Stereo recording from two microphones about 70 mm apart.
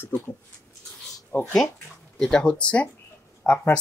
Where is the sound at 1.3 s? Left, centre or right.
Left.